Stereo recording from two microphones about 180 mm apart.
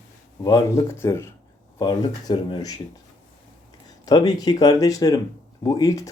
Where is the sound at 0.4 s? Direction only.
20° left (ahead or behind).